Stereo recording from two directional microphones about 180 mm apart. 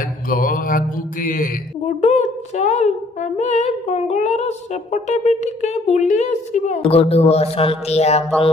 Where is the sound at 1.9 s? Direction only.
40° left (ahead or behind).